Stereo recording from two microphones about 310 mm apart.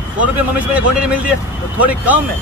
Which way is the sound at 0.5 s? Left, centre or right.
Centre.